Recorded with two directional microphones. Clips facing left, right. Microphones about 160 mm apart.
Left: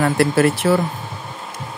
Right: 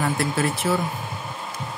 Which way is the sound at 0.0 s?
70° left (ahead or behind).